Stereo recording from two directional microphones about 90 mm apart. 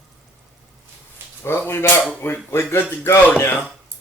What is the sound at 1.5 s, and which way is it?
Speech, 25° left (ahead or behind).